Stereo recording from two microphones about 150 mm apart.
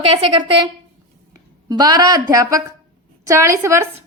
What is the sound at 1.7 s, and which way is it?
A woman's voice, 25° right (ahead or behind).